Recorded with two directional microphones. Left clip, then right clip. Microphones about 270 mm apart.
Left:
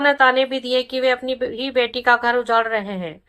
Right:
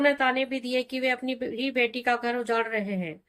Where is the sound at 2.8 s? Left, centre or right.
Left.